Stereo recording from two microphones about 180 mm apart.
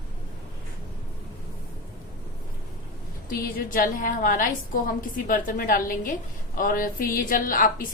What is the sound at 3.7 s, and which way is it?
A woman's voice, 50° left (ahead or behind).